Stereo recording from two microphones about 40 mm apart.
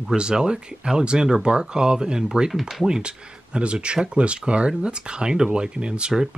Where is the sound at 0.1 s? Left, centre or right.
Right.